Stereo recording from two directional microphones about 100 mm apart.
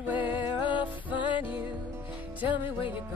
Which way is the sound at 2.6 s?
60° left (ahead or behind).